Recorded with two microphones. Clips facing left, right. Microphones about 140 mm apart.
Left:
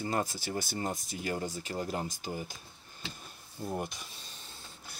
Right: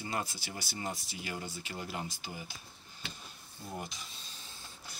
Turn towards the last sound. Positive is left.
turn(degrees=55)  # may be behind; listen again after turning